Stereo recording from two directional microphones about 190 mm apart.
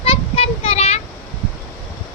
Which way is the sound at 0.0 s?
30° left (ahead or behind).